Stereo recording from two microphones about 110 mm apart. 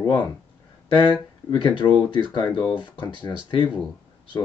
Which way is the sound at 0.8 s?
45° left (ahead or behind).